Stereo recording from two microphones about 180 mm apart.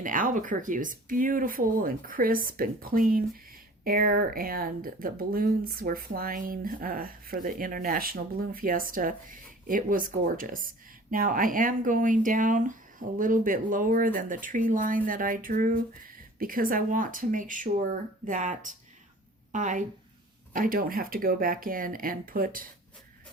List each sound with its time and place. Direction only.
0.0 s speech: 45° right (ahead or behind)